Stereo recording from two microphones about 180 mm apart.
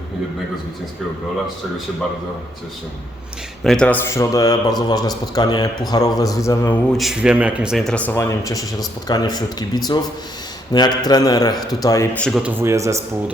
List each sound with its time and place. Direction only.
3.6 s speech: 5° left (ahead or behind)
6.9 s speech: centre (ahead or behind); by 12.2 s 15° left (ahead or behind)
12.2 s speech: 5° right (ahead or behind)